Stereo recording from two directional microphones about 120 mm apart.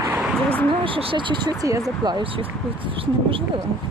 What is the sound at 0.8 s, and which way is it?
Speech, 50° right (ahead or behind).